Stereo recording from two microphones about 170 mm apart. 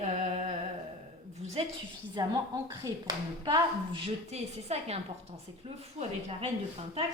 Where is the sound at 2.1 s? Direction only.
25° right (ahead or behind); by 6.5 s 40° right (ahead or behind).